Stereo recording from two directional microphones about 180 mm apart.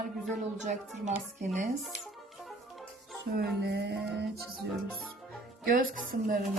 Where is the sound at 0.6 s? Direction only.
45° right (ahead or behind).